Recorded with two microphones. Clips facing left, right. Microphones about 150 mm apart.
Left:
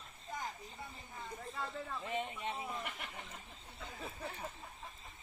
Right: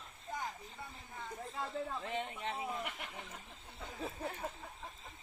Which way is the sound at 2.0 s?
10° left (ahead or behind).